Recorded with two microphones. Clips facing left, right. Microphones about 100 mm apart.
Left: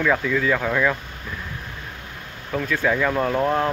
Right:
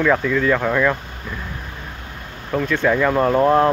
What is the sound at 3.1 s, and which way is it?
Speech, 20° right (ahead or behind).